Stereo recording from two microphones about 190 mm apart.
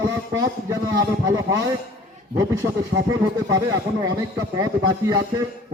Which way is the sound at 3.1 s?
20° right (ahead or behind).